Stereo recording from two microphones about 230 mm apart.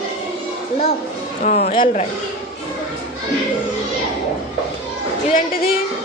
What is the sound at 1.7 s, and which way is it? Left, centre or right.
Speech, left.